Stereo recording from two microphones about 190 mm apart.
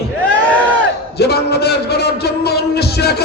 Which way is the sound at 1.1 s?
60° left (ahead or behind).